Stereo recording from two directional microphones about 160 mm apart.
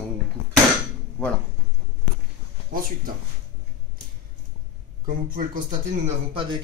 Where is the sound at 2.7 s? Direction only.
60° right (ahead or behind).